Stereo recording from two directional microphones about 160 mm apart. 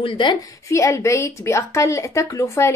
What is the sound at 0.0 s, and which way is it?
A woman's voice, 30° left (ahead or behind).